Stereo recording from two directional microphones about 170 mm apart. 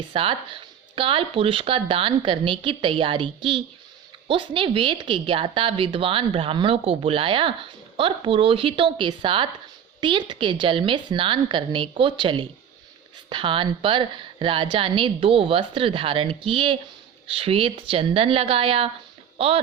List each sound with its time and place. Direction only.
0.1 s a woman's voice: 30° right (ahead or behind)